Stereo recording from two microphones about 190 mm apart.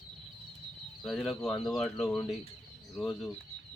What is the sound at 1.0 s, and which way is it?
Speech, centre (ahead or behind).